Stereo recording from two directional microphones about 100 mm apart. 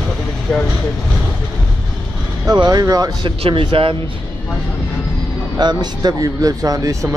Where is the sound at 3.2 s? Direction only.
60° right (ahead or behind).